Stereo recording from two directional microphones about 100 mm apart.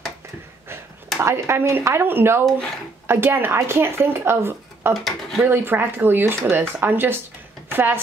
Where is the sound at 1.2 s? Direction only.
25° right (ahead or behind).